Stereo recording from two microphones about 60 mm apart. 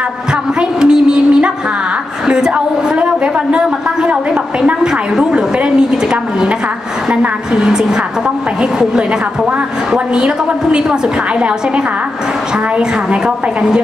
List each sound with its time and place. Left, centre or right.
0.6 s a sound: centre
2.2 s a woman's voice: centre
3.5 s a woman's voice: centre
5.1 s a sound: centre
7.1 s a woman's voice: centre
10.1 s a woman's voice: centre